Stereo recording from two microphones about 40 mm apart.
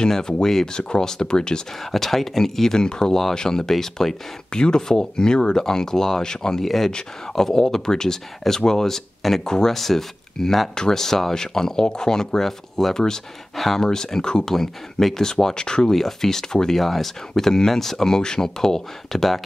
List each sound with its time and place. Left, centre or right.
0.0 s speech: centre
1.9 s speech: centre
4.5 s speech: left
6.6 s speech: centre
13.6 s speech: centre
13.8 s speech: centre
15.9 s speech: centre